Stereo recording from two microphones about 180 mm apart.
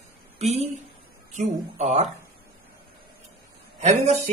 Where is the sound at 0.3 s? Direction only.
35° right (ahead or behind).